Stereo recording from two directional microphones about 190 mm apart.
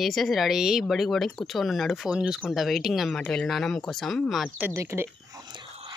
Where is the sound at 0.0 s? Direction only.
Centre (ahead or behind).